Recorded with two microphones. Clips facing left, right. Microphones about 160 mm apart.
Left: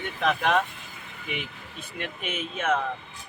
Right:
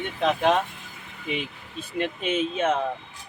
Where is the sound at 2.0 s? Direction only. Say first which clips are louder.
Right 8 dB; 30° right (ahead or behind).